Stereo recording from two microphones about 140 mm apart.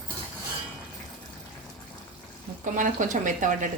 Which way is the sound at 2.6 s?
65° right (ahead or behind).